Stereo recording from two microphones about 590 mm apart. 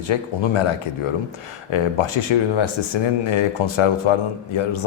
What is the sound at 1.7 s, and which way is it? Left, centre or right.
Speech, left.